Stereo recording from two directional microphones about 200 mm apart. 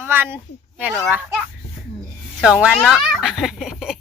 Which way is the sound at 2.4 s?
5° right (ahead or behind).